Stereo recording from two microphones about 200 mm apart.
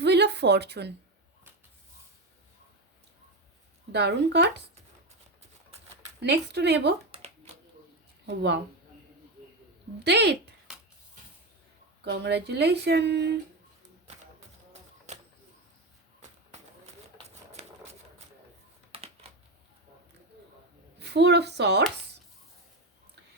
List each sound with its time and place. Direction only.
0.0 s a sound: 55° right (ahead or behind)
3.9 s speech: 60° right (ahead or behind)
6.2 s speech: 60° right (ahead or behind)
7.1 s a sound: 35° right (ahead or behind)
8.3 s speech: 60° right (ahead or behind)
10.0 s speech: 55° right (ahead or behind)
12.0 s speech: 55° right (ahead or behind)
14.1 s music: 35° right (ahead or behind)
16.5 s a sound: 35° right (ahead or behind)
18.9 s typing: 30° right (ahead or behind)
21.0 s speech: 55° right (ahead or behind)